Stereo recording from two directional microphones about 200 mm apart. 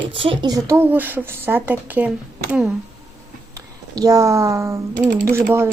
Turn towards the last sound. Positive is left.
turn(degrees=-10)  # may be behind; listen again after turning